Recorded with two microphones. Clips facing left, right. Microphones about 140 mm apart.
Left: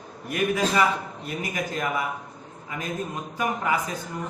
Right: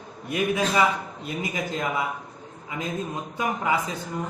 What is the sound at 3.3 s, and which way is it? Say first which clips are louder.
Speech: even; 20° right (ahead or behind).